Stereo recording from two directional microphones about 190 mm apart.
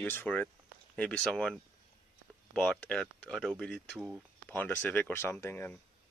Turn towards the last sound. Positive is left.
turn(degrees=10)  # may be behind; listen again after turning